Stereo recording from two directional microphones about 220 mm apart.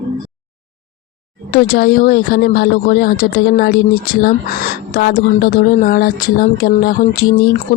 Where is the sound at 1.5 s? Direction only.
45° left (ahead or behind).